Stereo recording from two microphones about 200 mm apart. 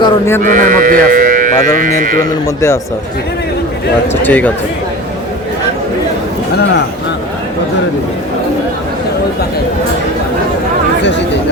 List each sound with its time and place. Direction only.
0.0 s speech: 10° left (ahead or behind)
0.4 s speech: 40° right (ahead or behind)
4.2 s speech: 10° left (ahead or behind)